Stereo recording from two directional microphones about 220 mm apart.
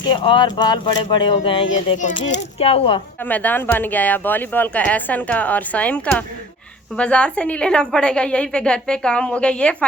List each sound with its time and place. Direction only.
0.1 s speech: 20° left (ahead or behind)
1.9 s speech: 35° left (ahead or behind)
3.2 s a woman's voice: 5° left (ahead or behind)